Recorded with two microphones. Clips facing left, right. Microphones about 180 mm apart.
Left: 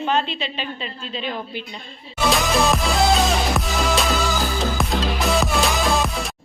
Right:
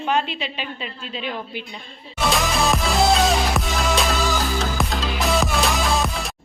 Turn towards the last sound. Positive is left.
turn(degrees=0)  # may be behind; listen again after turning